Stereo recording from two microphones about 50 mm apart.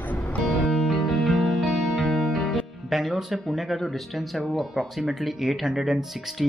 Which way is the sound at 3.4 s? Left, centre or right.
Centre.